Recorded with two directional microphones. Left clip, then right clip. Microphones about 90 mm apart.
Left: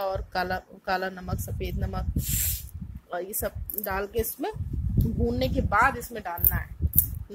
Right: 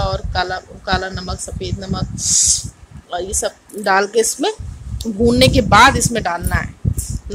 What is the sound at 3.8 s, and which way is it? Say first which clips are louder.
Speech: right 15 dB; 5° right (ahead or behind).